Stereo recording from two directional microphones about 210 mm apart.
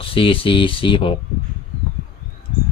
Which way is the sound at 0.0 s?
25° left (ahead or behind).